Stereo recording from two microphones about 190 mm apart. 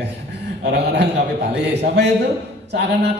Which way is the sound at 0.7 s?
65° right (ahead or behind).